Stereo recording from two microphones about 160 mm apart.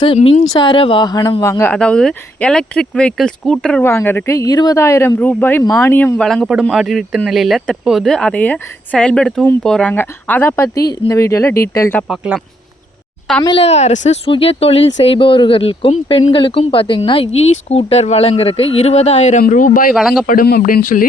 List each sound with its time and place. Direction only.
0.0 s speech: 35° left (ahead or behind); by 1.7 s 20° left (ahead or behind)
1.7 s speech: 5° left (ahead or behind)
11.9 s speech: centre (ahead or behind)
13.4 s speech: 35° left (ahead or behind)
14.3 s speech: 35° left (ahead or behind); by 19.9 s 60° left (ahead or behind)
20.0 s speech: centre (ahead or behind)
20.2 s speech: 65° left (ahead or behind)